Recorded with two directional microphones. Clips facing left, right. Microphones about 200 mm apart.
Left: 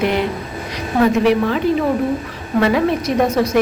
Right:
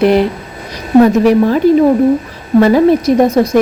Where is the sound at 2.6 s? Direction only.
35° right (ahead or behind).